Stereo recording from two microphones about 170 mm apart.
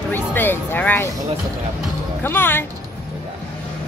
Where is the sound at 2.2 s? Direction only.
10° left (ahead or behind).